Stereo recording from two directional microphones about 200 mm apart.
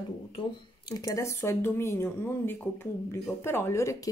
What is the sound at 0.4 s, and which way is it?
Speech, 20° left (ahead or behind).